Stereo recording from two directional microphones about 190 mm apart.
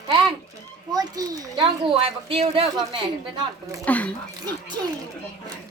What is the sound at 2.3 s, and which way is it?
Speech, 30° right (ahead or behind).